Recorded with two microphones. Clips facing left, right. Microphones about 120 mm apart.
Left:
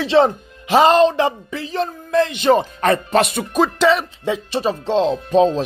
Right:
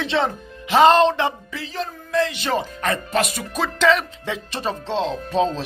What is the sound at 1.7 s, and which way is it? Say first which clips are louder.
Speech: left 5 dB; 55° left (ahead or behind).